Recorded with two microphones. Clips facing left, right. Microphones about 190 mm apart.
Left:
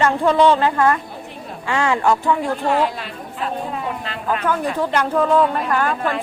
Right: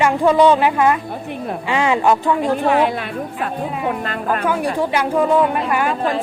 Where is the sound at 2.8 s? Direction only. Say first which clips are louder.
Right 5 dB; 60° right (ahead or behind).